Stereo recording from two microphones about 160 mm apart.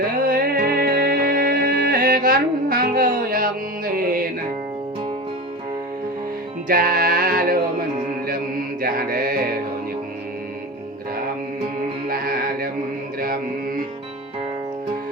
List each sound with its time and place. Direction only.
0.0 s music: 70° right (ahead or behind)
6.7 s music: 65° right (ahead or behind)
8.8 s music: 65° right (ahead or behind)
12.0 s music: 65° right (ahead or behind)